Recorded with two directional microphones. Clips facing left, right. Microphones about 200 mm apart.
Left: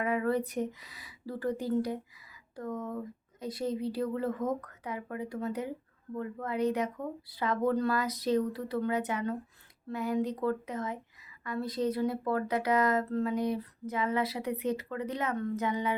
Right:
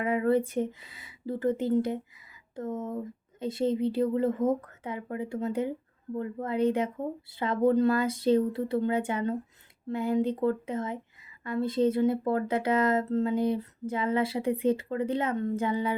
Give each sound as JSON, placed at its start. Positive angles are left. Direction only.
{"t": 0.0, "sound": "speech", "side_deg": -25}